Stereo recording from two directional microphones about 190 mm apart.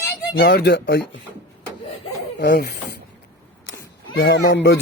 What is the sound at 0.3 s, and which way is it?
Speech, 60° left (ahead or behind).